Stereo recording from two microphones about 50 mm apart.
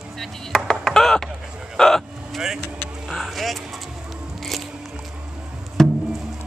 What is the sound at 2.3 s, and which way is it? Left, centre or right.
Vehicle, centre.